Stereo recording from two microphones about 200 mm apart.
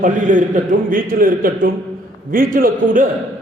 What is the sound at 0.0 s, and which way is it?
A man's voice, 40° right (ahead or behind).